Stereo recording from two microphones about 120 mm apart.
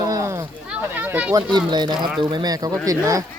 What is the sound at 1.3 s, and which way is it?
Speech, 40° right (ahead or behind).